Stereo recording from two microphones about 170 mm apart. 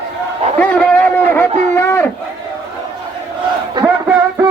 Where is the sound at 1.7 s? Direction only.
15° left (ahead or behind).